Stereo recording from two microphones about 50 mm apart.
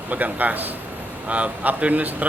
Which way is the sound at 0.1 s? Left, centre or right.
Right.